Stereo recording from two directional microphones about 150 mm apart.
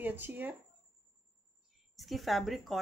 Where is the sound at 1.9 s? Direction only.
Centre (ahead or behind).